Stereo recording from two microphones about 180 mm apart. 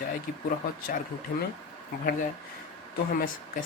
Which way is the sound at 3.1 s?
50° left (ahead or behind).